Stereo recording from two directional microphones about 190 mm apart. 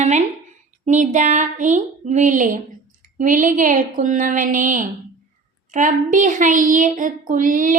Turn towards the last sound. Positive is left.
turn(degrees=-45)  # may be behind; listen again after turning